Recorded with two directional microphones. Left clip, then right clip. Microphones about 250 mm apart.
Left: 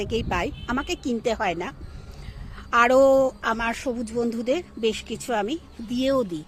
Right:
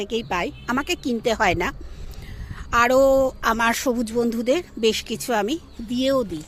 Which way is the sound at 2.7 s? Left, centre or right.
Centre.